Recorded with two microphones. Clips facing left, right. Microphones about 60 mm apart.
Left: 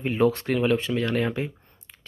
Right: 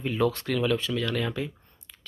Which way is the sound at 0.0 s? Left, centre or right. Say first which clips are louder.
Left 4 dB; left.